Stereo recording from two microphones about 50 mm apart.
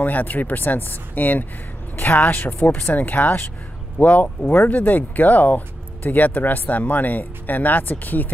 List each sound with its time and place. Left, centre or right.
0.0 s speech: left